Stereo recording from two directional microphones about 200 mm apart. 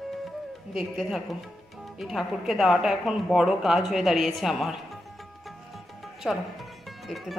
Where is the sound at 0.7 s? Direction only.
5° right (ahead or behind).